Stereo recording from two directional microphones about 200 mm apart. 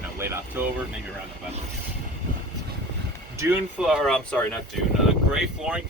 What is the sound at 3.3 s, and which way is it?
Speech, 10° right (ahead or behind).